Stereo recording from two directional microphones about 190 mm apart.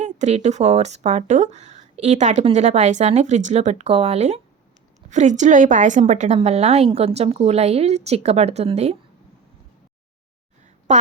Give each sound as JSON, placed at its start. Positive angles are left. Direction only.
{"t": 0.0, "sound": "speech", "side_deg": -35}